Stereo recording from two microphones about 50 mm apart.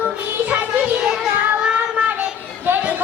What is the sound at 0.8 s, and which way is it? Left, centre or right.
Child singing, centre.